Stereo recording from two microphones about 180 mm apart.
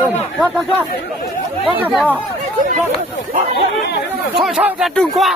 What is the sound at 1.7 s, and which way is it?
Speech, 5° right (ahead or behind).